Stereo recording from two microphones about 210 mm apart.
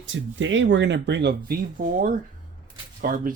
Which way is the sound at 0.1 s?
65° right (ahead or behind).